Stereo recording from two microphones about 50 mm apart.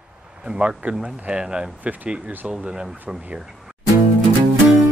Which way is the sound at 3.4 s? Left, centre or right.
Centre.